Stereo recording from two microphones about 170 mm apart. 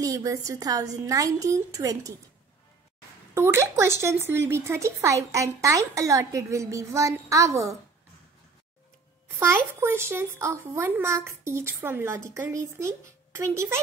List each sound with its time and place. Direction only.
0.0 s a woman's voice: 20° right (ahead or behind)
3.3 s speech: 15° right (ahead or behind)
9.8 s speech: 15° right (ahead or behind)